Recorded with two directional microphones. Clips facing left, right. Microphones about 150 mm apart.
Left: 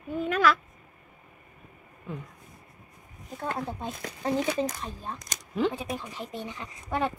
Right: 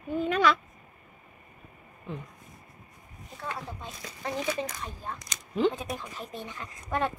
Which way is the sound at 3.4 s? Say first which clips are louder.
Left 5 dB; 45° left (ahead or behind).